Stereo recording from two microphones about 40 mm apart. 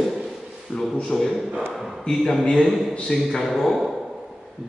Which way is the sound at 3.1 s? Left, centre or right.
Centre.